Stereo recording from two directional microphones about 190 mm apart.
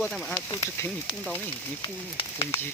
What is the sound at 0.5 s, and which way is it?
Speech, 20° left (ahead or behind).